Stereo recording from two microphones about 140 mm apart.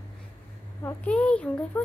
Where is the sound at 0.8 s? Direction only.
10° left (ahead or behind).